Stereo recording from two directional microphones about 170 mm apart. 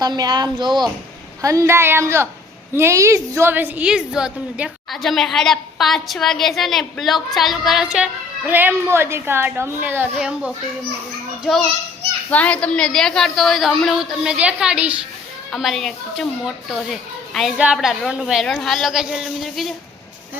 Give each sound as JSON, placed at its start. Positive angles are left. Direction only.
{"t": 0.0, "sound": "a woman's voice", "side_deg": -25}
{"t": 12.3, "sound": "a woman's voice", "side_deg": 10}